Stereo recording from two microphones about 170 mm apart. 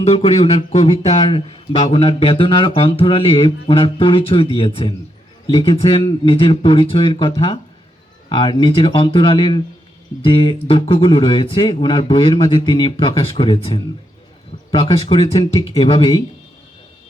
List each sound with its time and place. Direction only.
0.0 s speech: 40° left (ahead or behind)